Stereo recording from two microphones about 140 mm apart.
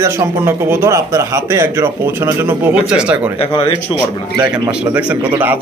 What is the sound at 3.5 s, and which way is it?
Speech, 35° left (ahead or behind).